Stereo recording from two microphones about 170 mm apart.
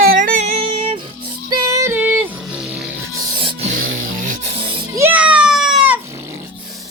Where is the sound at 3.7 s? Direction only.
50° right (ahead or behind).